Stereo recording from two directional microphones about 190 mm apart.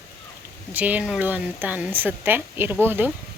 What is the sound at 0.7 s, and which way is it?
Speech, 10° right (ahead or behind).